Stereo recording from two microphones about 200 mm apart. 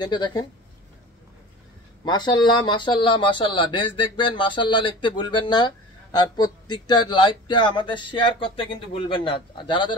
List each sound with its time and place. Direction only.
0.0 s speech: 20° left (ahead or behind)
2.0 s speech: 20° left (ahead or behind)